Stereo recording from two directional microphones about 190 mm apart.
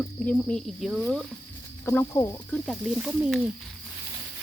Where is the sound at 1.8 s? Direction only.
15° left (ahead or behind).